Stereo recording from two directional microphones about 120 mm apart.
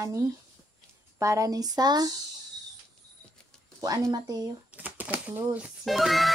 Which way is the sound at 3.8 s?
30° right (ahead or behind).